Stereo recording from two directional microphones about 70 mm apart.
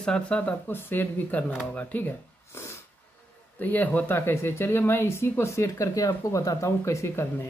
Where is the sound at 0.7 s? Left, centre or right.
Left.